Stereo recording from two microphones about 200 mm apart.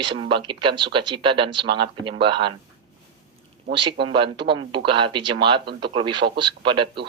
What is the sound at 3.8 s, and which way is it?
Speech, 25° right (ahead or behind).